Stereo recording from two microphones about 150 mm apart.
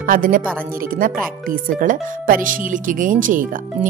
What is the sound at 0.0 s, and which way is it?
Speech, 70° right (ahead or behind).